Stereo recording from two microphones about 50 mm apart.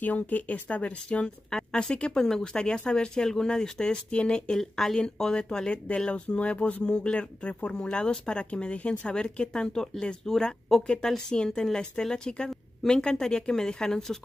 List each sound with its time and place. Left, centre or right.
0.0 s speech: left
4.6 s speech: centre